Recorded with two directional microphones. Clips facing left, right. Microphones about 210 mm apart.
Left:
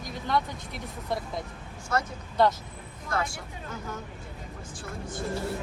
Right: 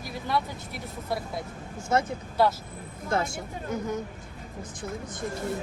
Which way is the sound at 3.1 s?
25° right (ahead or behind).